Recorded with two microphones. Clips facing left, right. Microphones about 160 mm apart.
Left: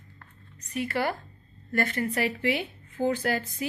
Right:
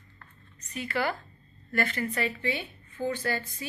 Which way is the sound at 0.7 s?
55° left (ahead or behind).